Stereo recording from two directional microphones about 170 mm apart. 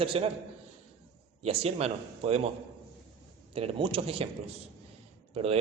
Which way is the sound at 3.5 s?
35° right (ahead or behind).